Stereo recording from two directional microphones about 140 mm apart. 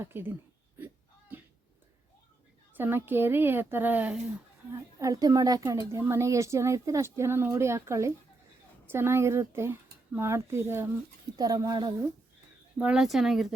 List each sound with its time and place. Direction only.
0.0 s speech: 15° right (ahead or behind)
2.7 s speech: 15° right (ahead or behind)
4.7 s speech: 25° right (ahead or behind)
12.8 s speech: 5° right (ahead or behind)